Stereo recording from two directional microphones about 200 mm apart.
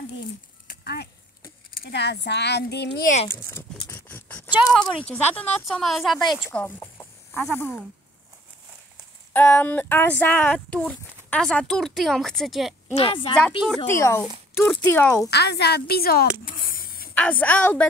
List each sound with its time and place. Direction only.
0.7 s a sound: 50° left (ahead or behind)
1.7 s speech: 50° left (ahead or behind)
3.3 s speech: 15° left (ahead or behind)
6.6 s a sound: 10° left (ahead or behind)
7.5 s speech: 10° left (ahead or behind)
9.3 s speech: 10° left (ahead or behind)
12.9 s a woman's voice: 25° left (ahead or behind)
13.8 s speech: 15° left (ahead or behind)
15.2 s speech: 55° left (ahead or behind)
17.1 s a woman's voice: 5° left (ahead or behind)